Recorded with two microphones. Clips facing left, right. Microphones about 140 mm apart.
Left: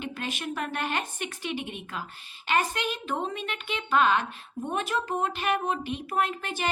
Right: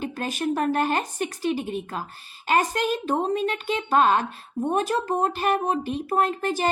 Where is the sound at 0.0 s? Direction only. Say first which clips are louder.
Right 6 dB; 40° right (ahead or behind).